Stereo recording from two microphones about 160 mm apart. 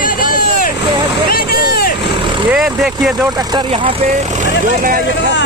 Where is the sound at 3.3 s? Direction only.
25° right (ahead or behind).